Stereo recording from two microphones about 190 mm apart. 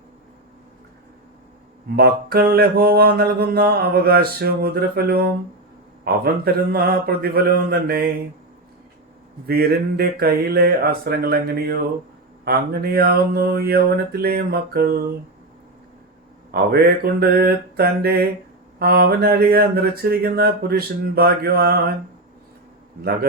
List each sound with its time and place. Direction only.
2.0 s mantra: 55° right (ahead or behind)
6.2 s speech: 55° right (ahead or behind)
9.5 s speech: 55° right (ahead or behind)
12.5 s mantra: 55° right (ahead or behind)
16.5 s mantra: 55° right (ahead or behind)